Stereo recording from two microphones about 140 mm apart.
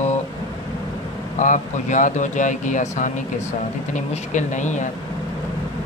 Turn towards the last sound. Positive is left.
turn(degrees=60)  # may be behind; listen again after turning